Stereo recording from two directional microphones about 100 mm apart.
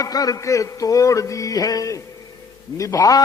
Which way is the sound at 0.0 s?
35° left (ahead or behind).